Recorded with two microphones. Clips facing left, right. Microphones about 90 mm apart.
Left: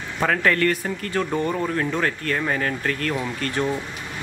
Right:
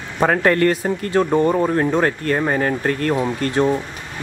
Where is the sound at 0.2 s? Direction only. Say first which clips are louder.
Right 5 dB; 25° right (ahead or behind).